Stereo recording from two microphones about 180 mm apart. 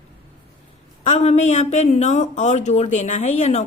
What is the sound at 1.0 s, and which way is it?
Speech, 40° left (ahead or behind).